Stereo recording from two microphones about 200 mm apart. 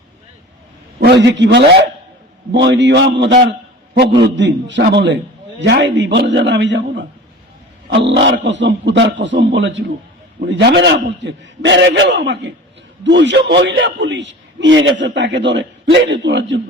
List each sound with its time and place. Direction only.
0.9 s a man's voice: 55° right (ahead or behind)
4.4 s a man's voice: 65° right (ahead or behind)
7.9 s a man's voice: 60° right (ahead or behind)